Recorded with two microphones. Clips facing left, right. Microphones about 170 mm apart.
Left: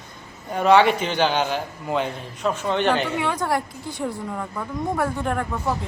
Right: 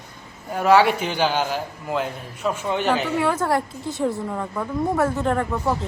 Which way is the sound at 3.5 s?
25° right (ahead or behind).